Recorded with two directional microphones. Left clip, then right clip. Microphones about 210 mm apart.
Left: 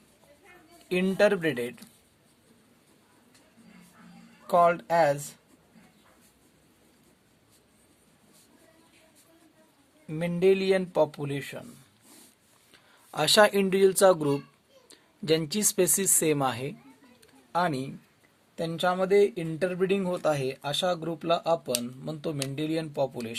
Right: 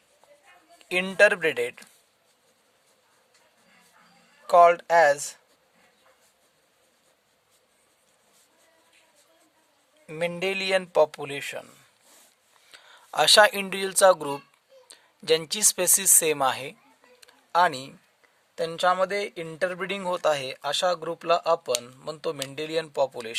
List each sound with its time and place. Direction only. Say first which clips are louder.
0.9 s speech: right 4 dB; 50° right (ahead or behind)
4.4 s speech: right 5 dB; 50° right (ahead or behind)
10.1 s speech: left 3 dB; 50° right (ahead or behind)
12.7 s speech: right 7 dB; 40° right (ahead or behind)
17.2 s a sound: right 6 dB; 45° right (ahead or behind)
18.5 s speech: right 4 dB; 50° right (ahead or behind)